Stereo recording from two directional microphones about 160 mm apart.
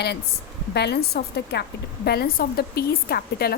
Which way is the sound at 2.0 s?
75° left (ahead or behind).